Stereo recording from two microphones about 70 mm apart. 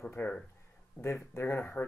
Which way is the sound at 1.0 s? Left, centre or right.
Left.